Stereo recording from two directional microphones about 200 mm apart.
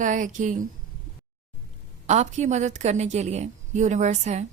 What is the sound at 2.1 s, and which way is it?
A woman's voice, 35° right (ahead or behind).